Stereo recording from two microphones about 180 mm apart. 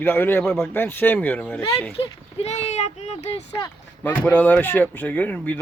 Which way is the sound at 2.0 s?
35° left (ahead or behind).